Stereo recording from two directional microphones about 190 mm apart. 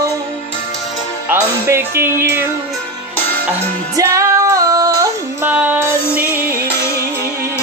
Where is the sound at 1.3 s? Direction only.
10° right (ahead or behind).